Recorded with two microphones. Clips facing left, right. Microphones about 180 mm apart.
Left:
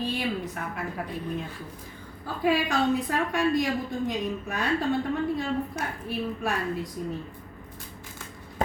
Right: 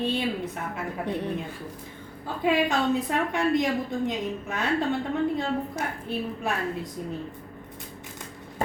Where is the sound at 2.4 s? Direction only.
20° right (ahead or behind).